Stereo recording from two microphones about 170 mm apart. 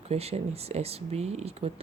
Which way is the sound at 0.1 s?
40° right (ahead or behind).